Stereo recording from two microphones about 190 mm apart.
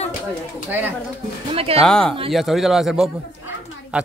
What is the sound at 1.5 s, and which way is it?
Speech, 30° right (ahead or behind).